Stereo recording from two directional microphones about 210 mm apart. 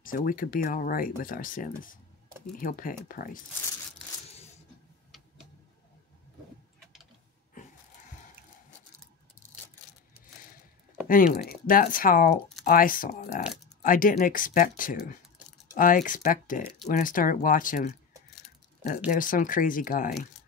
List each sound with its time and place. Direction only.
0.0 s speech: 40° left (ahead or behind)
11.1 s speech: 40° left (ahead or behind)
19.0 s speech: 40° left (ahead or behind)